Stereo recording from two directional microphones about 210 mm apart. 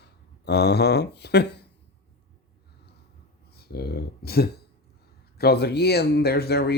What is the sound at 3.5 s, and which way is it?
Speech, 50° left (ahead or behind).